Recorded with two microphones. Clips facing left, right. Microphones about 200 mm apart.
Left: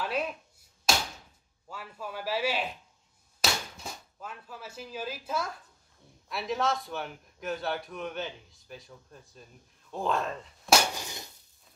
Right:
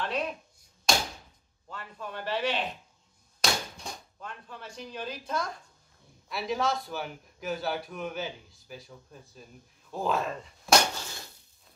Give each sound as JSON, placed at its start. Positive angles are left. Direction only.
{"t": 0.0, "sound": "chopping", "side_deg": 5}
{"t": 1.7, "sound": "a man's voice", "side_deg": 5}
{"t": 11.0, "sound": "dishes", "side_deg": 15}